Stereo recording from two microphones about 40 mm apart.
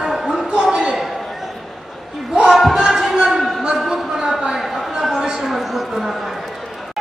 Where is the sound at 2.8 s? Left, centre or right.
Centre.